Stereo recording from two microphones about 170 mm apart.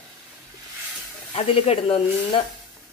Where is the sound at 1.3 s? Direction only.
35° left (ahead or behind).